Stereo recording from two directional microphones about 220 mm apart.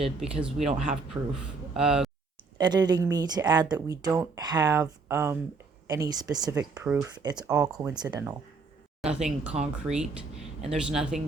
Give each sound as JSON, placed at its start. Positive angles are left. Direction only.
{"t": 0.6, "sound": "speech", "side_deg": -30}
{"t": 1.2, "sound": "speech", "side_deg": -15}
{"t": 1.7, "sound": "speech", "side_deg": 0}
{"t": 2.6, "sound": "speech", "side_deg": -20}
{"t": 7.2, "sound": "speech", "side_deg": -20}
{"t": 9.0, "sound": "speech", "side_deg": -5}